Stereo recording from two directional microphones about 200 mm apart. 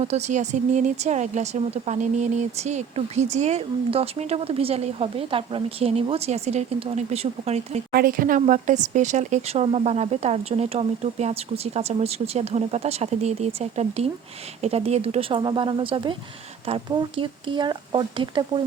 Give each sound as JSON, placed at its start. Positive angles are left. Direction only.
{"t": 0.0, "sound": "speech", "side_deg": -35}
{"t": 7.9, "sound": "speech", "side_deg": -45}